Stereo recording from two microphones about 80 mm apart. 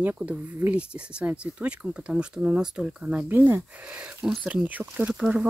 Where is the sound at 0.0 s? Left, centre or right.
Right.